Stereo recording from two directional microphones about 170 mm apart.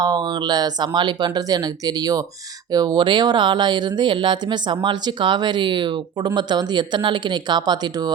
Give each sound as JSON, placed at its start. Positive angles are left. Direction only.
{"t": 0.0, "sound": "speech", "side_deg": -25}